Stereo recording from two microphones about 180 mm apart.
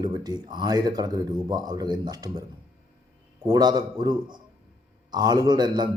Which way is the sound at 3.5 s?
20° right (ahead or behind).